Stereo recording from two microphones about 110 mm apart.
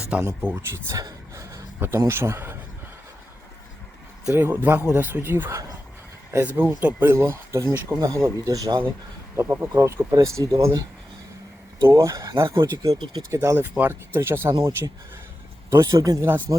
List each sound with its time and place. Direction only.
0.1 s speech: 15° right (ahead or behind)
1.0 s a sound: 35° right (ahead or behind)
1.8 s speech: 20° right (ahead or behind)
4.3 s speech: 20° right (ahead or behind)
9.3 s speech: 20° right (ahead or behind)